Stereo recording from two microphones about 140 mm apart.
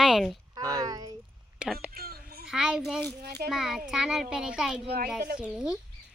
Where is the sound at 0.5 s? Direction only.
25° right (ahead or behind).